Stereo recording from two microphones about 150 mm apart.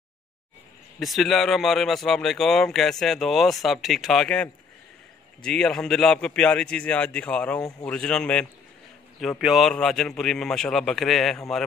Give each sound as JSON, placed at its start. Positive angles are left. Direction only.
{"t": 0.9, "sound": "speech", "side_deg": 0}